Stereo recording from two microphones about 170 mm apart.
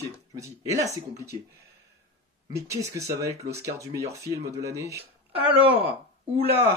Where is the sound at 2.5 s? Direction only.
15° right (ahead or behind).